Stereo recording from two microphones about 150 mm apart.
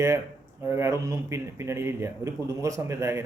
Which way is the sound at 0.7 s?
20° right (ahead or behind).